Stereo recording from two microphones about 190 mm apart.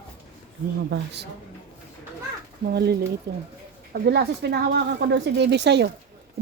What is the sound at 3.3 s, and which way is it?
A woman's voice, 60° right (ahead or behind).